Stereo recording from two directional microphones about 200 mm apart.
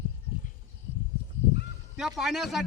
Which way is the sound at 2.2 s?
Centre (ahead or behind).